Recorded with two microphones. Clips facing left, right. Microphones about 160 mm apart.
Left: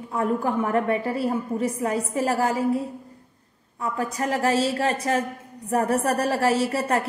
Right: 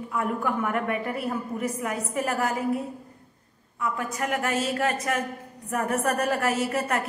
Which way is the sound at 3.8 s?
35° left (ahead or behind).